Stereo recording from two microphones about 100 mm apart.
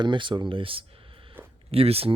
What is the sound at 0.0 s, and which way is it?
Speech, 55° right (ahead or behind).